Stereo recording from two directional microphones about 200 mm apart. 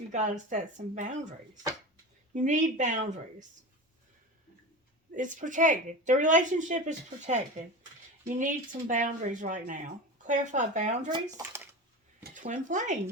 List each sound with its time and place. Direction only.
0.1 s speech: 35° right (ahead or behind)
5.1 s speech: 40° right (ahead or behind)
11.1 s speech: 15° right (ahead or behind)
12.3 s speech: 40° right (ahead or behind)